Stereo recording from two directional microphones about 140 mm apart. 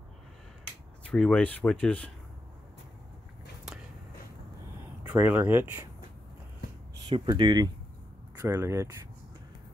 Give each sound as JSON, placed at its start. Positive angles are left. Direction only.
{"t": 1.0, "sound": "speech", "side_deg": 5}
{"t": 5.0, "sound": "speech", "side_deg": -10}
{"t": 7.1, "sound": "speech", "side_deg": -35}
{"t": 8.4, "sound": "speech", "side_deg": -20}